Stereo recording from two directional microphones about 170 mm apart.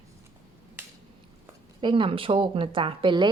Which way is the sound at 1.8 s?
30° right (ahead or behind).